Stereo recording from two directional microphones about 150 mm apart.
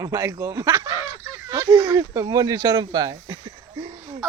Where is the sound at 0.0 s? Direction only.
20° right (ahead or behind).